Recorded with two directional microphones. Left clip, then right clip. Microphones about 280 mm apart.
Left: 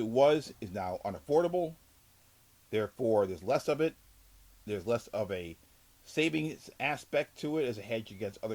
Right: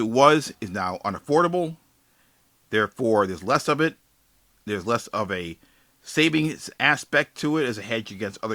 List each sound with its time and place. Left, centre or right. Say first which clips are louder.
0.0 s speech: right 9 dB; centre